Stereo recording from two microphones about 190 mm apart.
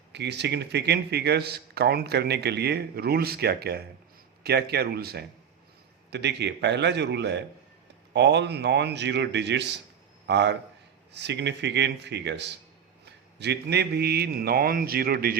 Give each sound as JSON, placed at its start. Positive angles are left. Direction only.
{"t": 0.1, "sound": "a man's voice", "side_deg": -65}